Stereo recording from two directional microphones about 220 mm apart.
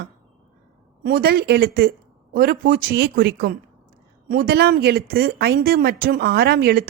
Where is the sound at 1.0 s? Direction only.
45° right (ahead or behind).